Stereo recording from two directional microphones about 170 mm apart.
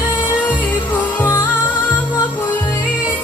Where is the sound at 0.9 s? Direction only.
15° left (ahead or behind).